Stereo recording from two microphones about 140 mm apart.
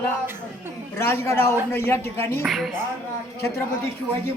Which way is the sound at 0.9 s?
20° left (ahead or behind).